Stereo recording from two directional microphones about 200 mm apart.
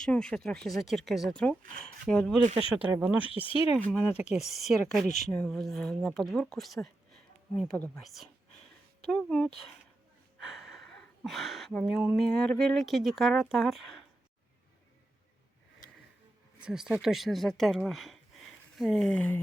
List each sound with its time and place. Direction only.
0.0 s speech: 5° left (ahead or behind)
2.4 s speech: 35° right (ahead or behind)
2.9 s speech: 5° right (ahead or behind)
3.4 s speech: 25° left (ahead or behind)
3.8 s speech: 10° left (ahead or behind)
16.6 s speech: 5° right (ahead or behind)